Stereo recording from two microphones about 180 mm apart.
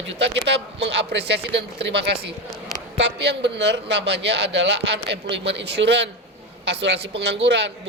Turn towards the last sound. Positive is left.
turn(degrees=-75)  # may be behind; listen again after turning